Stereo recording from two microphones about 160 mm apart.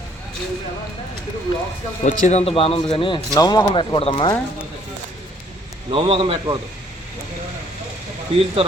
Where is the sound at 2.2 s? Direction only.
45° left (ahead or behind).